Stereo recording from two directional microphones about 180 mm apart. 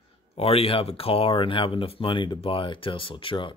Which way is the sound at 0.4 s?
30° left (ahead or behind).